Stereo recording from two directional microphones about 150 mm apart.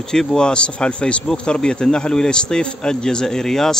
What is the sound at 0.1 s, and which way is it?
Speech, 5° left (ahead or behind).